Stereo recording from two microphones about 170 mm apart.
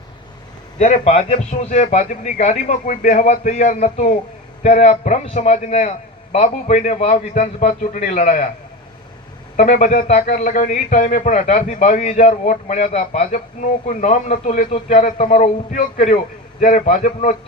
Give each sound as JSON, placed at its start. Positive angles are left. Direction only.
{"t": 0.8, "sound": "a man's voice", "side_deg": 40}
{"t": 9.6, "sound": "a man's voice", "side_deg": 50}